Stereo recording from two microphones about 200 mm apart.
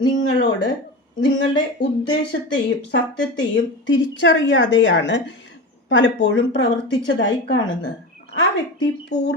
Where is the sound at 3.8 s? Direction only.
65° left (ahead or behind).